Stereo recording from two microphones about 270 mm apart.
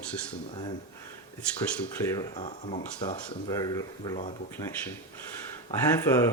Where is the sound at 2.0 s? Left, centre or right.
Centre.